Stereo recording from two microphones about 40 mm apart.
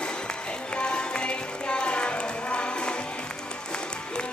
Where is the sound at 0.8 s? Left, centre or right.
Left.